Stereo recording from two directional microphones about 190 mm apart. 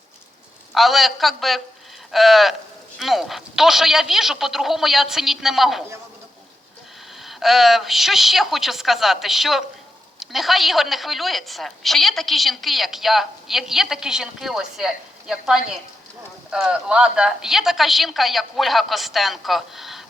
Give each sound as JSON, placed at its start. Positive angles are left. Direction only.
{"t": 0.7, "sound": "a woman's voice", "side_deg": 0}
{"t": 7.3, "sound": "a woman's voice", "side_deg": 0}